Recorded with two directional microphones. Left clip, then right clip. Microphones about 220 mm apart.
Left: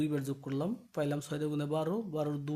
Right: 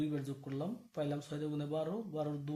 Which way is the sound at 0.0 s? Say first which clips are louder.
Left 5 dB; 40° left (ahead or behind).